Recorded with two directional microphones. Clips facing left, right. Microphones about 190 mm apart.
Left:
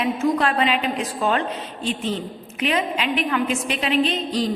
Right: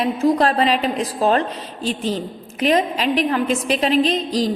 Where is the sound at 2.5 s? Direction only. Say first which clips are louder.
Right 5 dB; 40° right (ahead or behind).